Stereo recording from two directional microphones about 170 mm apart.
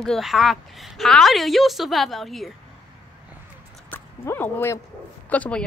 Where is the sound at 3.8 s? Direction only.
10° left (ahead or behind).